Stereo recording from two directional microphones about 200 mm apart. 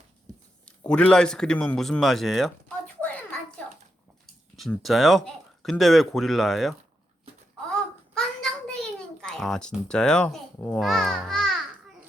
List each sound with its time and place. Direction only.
0.9 s speech: 5° left (ahead or behind)
4.5 s speech: centre (ahead or behind)
7.7 s a sound: 5° left (ahead or behind)